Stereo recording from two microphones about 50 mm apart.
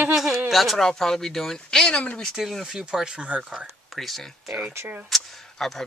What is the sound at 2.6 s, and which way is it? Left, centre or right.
Speech, centre.